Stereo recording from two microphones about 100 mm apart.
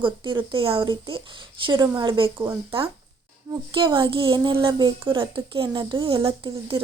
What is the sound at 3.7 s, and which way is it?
A woman's voice, 55° right (ahead or behind).